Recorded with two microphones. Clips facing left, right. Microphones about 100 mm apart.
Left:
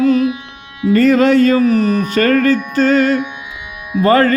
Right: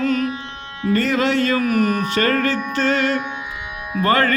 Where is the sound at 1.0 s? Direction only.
45° left (ahead or behind).